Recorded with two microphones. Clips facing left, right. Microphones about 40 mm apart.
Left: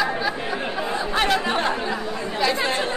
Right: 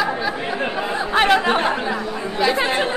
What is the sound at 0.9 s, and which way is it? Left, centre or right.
Speech, right.